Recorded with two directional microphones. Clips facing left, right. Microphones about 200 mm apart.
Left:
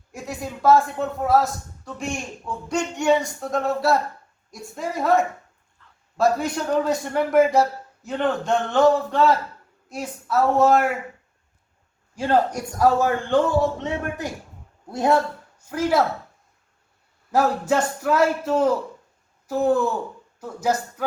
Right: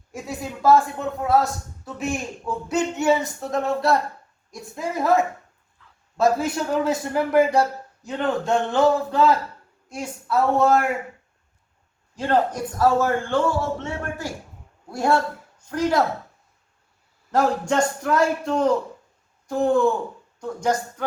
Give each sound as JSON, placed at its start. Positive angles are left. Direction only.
{"t": 0.1, "sound": "a man's voice", "side_deg": 0}
{"t": 12.1, "sound": "a man's voice", "side_deg": 10}
{"t": 15.5, "sound": "speech", "side_deg": 5}
{"t": 17.3, "sound": "a man's voice", "side_deg": 5}